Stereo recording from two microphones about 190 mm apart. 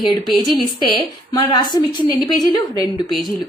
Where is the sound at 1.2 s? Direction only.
20° left (ahead or behind).